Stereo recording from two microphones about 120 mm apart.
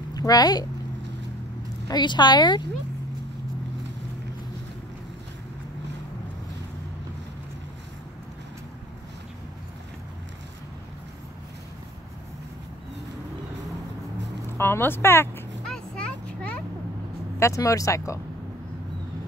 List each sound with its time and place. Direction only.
0.1 s speech: 30° left (ahead or behind)
1.9 s speech: 35° left (ahead or behind)
14.6 s speech: 20° left (ahead or behind)
15.7 s a sound: 10° left (ahead or behind)
17.4 s speech: 25° left (ahead or behind)